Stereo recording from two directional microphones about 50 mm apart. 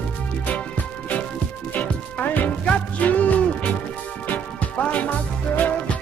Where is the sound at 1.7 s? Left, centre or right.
Left.